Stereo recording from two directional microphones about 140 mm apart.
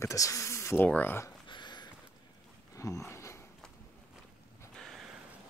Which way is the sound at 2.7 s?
20° left (ahead or behind).